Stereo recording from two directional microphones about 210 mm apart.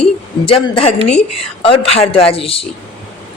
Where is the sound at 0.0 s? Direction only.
25° left (ahead or behind).